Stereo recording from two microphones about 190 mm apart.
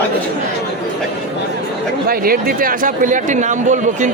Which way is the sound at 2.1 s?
50° right (ahead or behind).